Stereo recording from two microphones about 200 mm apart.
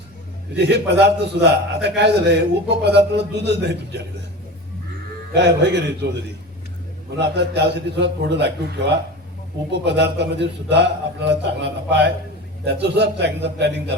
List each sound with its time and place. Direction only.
0.5 s a man's voice: 60° right (ahead or behind)
5.3 s a man's voice: 60° right (ahead or behind)
7.2 s a man's voice: 60° right (ahead or behind)
9.8 s a man's voice: 60° right (ahead or behind)